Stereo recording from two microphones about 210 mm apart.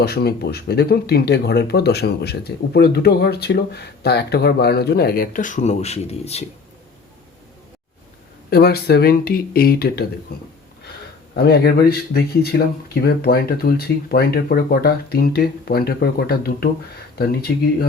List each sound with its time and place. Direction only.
0.0 s speech: 50° left (ahead or behind); by 6.4 s 30° left (ahead or behind)
8.4 s speech: 50° left (ahead or behind)
11.3 s speech: 50° left (ahead or behind)